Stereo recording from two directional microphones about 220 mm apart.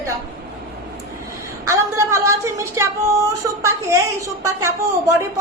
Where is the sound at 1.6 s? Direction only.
15° right (ahead or behind).